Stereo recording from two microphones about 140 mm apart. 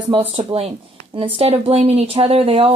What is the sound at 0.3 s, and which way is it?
Speech, 45° right (ahead or behind).